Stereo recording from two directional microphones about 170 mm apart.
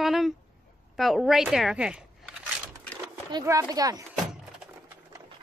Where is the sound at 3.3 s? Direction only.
20° right (ahead or behind).